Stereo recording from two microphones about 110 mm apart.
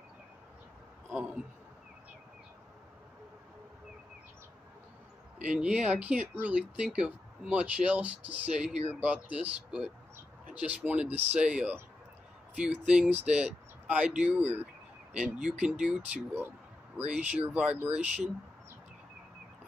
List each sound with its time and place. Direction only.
1.1 s speech: 10° right (ahead or behind)
5.4 s speech: 10° right (ahead or behind)